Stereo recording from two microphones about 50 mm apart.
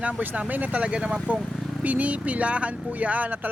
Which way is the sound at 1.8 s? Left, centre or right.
Right.